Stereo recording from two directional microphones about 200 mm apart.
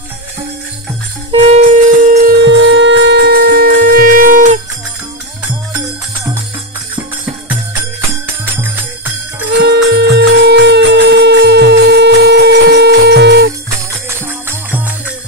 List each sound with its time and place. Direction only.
1.3 s music: 35° right (ahead or behind)
2.4 s wind instrument: 65° right (ahead or behind); by 4.6 s 45° right (ahead or behind)
9.6 s music: 55° right (ahead or behind)
14.0 s music: 10° right (ahead or behind)